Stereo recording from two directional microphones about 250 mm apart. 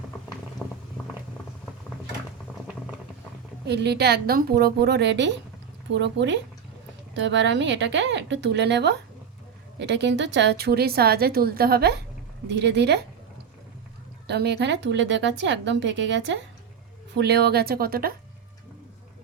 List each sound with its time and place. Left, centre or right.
0.6 s a sound: centre
3.7 s a woman's voice: right
14.3 s a woman's voice: right